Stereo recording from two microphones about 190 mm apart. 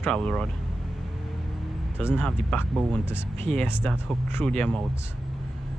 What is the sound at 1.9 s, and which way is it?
Speech, 10° left (ahead or behind).